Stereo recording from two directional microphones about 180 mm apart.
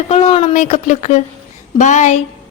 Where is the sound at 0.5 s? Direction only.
45° left (ahead or behind).